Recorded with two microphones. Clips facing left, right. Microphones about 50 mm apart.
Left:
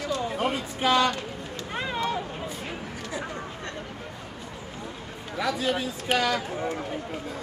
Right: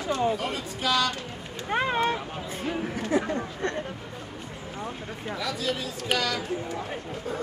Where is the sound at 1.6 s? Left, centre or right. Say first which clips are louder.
Right 5 dB; right.